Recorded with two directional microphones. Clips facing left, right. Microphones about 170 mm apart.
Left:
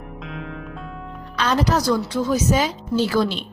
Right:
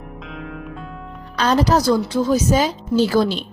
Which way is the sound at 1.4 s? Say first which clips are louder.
Right 4 dB; 35° right (ahead or behind).